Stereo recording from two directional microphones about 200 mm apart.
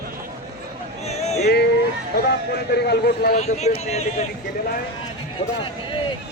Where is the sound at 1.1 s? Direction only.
35° left (ahead or behind).